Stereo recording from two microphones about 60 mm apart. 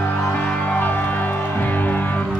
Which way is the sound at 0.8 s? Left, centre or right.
Left.